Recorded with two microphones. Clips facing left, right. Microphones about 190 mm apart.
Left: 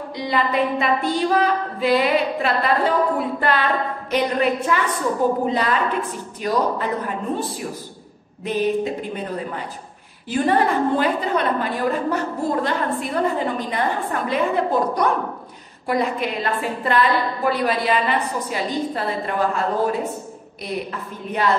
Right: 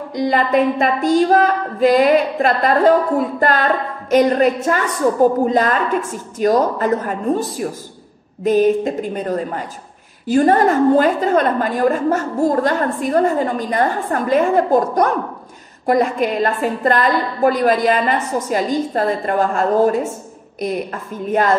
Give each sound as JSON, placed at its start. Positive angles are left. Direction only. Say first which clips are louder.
{"t": 0.1, "sound": "a woman's voice", "louder": "right 6 dB", "side_deg": -45}
{"t": 8.5, "sound": "a woman's voice", "louder": "right 7 dB", "side_deg": -45}